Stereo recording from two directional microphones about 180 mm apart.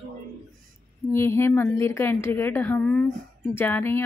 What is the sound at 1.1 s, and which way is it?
A woman's voice, 15° left (ahead or behind).